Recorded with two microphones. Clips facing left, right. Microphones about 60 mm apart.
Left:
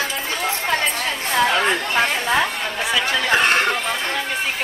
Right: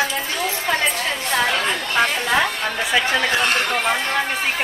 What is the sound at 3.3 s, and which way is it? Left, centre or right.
Speech, left.